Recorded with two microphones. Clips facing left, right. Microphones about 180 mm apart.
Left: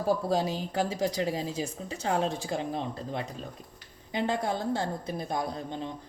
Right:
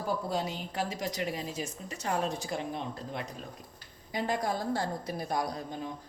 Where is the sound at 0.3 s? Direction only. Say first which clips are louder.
Left 4 dB; 30° left (ahead or behind).